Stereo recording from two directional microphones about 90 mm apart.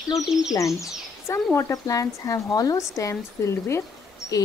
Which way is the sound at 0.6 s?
35° left (ahead or behind).